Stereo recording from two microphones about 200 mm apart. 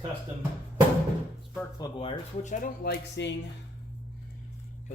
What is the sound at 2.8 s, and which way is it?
Speech, 60° left (ahead or behind).